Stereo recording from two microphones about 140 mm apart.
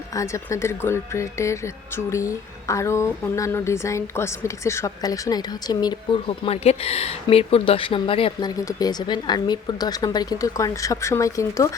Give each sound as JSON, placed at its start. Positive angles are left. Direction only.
{"t": 0.1, "sound": "speech", "side_deg": 20}
{"t": 8.4, "sound": "speech", "side_deg": 25}